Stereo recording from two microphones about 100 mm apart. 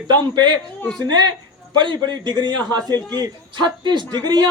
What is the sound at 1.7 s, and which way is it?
A man's voice, 45° right (ahead or behind).